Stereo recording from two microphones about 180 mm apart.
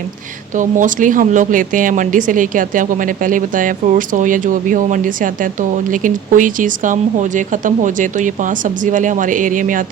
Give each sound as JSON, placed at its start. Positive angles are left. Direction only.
{"t": 0.5, "sound": "speech", "side_deg": -45}